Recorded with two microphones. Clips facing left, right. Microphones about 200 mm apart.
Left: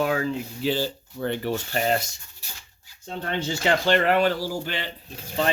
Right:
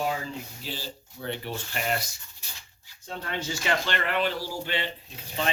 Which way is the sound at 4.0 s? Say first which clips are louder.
Left 7 dB; 45° left (ahead or behind).